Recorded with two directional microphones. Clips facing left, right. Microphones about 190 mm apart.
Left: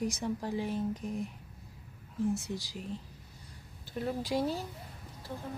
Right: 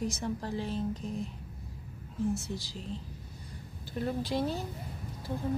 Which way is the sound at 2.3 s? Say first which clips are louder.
Even; 15° left (ahead or behind).